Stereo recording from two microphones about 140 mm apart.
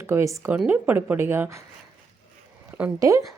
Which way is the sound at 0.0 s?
20° right (ahead or behind).